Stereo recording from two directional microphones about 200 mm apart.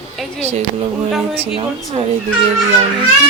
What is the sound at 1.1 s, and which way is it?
Speech, 5° right (ahead or behind).